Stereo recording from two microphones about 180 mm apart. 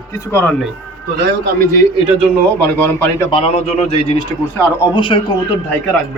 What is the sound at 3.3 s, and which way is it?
A man's voice, 35° left (ahead or behind).